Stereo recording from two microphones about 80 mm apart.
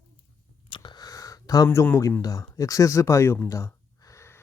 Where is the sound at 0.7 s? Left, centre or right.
Left.